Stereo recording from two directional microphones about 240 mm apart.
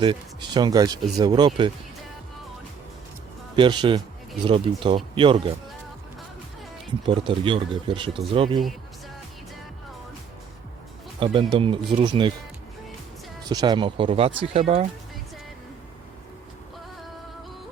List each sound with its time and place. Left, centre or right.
0.0 s speech: centre
3.5 s speech: centre
7.0 s speech: right
11.2 s speech: right
13.5 s speech: centre